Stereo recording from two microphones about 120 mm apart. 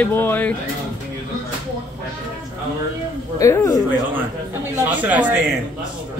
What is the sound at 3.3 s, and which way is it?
Speech, 25° left (ahead or behind).